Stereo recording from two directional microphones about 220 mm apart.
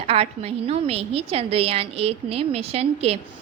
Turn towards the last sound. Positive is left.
turn(degrees=-30)  # may be behind; listen again after turning